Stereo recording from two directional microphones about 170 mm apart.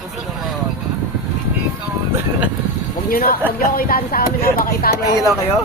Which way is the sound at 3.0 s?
55° left (ahead or behind).